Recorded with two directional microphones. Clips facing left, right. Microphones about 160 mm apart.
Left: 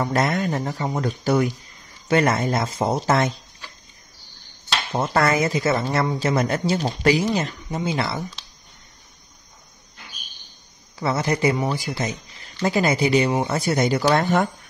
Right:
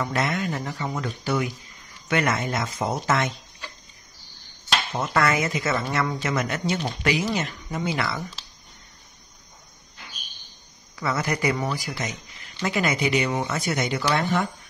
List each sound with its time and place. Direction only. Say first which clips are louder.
0.0 s a woman's voice: left 4 dB; 40° left (ahead or behind)
4.9 s a woman's voice: left 4 dB; 30° left (ahead or behind)
11.0 s a woman's voice: left 4 dB; 30° left (ahead or behind); by 14.5 s 45° left (ahead or behind)